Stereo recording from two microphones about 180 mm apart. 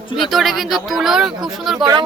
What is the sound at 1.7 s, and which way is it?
Speech, 25° right (ahead or behind).